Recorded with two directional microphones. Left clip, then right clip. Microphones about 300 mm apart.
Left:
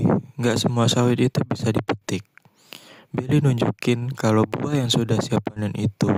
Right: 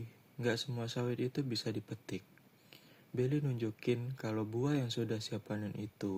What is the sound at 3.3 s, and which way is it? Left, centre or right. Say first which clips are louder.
Speech: left 16 dB; left.